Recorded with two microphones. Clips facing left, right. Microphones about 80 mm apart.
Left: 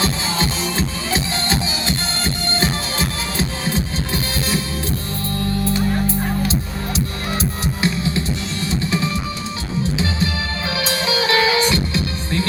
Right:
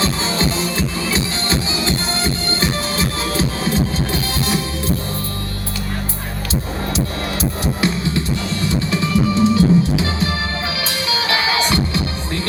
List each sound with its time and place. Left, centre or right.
0.3 s music: left
3.3 s music: right
9.6 s music: left
11.4 s music: right